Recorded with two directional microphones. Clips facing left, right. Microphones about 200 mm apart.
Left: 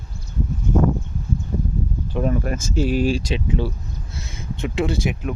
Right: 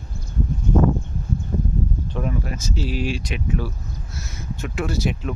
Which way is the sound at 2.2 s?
50° left (ahead or behind).